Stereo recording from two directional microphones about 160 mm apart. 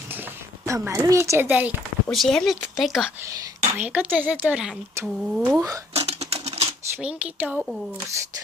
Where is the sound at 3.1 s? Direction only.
20° right (ahead or behind).